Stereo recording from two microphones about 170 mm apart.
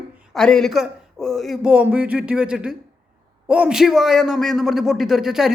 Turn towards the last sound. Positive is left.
turn(degrees=-5)  # may be behind; listen again after turning